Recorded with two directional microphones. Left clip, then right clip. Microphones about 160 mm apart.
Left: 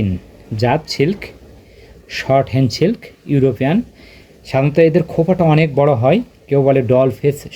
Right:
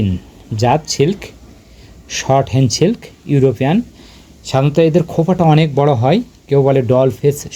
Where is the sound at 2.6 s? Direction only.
30° right (ahead or behind).